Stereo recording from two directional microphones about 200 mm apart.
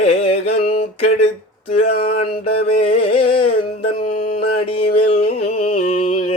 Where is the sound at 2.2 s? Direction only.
30° left (ahead or behind).